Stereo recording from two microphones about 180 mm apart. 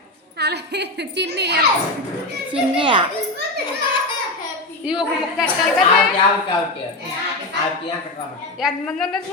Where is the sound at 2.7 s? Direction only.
25° right (ahead or behind).